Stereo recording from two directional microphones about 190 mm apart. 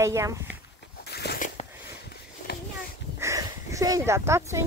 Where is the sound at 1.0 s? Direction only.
60° left (ahead or behind).